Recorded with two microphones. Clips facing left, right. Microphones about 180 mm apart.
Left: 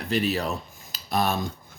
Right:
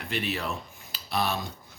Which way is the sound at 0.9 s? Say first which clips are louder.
Left 4 dB; 45° left (ahead or behind).